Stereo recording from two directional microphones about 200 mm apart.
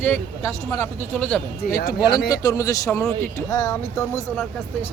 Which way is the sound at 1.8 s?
20° left (ahead or behind).